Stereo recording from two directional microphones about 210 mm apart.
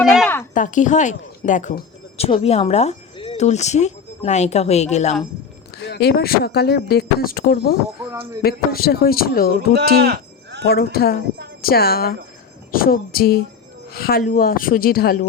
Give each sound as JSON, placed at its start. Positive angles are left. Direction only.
{"t": 0.0, "sound": "speech", "side_deg": 0}
{"t": 0.5, "sound": "speech", "side_deg": 40}
{"t": 5.7, "sound": "speech", "side_deg": 50}
{"t": 9.8, "sound": "livestock", "side_deg": -50}
{"t": 10.7, "sound": "speech", "side_deg": 45}